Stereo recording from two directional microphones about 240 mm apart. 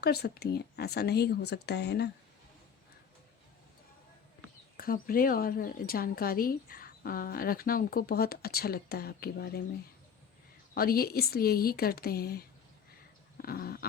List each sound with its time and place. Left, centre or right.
0.0 s speech: left
4.8 s a woman's voice: left
10.8 s a woman's voice: left
13.4 s dog: left